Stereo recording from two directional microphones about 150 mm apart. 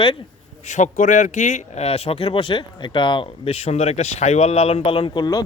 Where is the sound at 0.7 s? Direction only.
55° left (ahead or behind).